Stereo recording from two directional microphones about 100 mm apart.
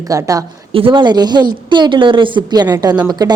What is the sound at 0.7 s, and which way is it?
A woman's voice, 65° right (ahead or behind).